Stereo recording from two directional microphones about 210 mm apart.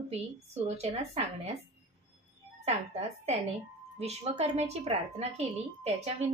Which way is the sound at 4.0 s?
30° right (ahead or behind).